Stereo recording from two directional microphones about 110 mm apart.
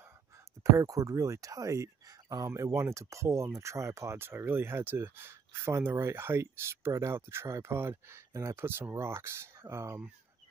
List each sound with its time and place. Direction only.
0.7 s speech: 30° right (ahead or behind)